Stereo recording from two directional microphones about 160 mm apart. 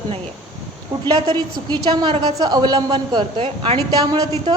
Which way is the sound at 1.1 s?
25° right (ahead or behind).